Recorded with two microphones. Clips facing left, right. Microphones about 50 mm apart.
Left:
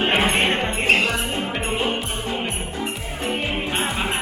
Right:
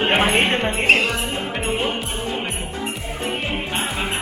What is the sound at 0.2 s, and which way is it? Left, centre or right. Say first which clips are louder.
Music: right 2 dB; right.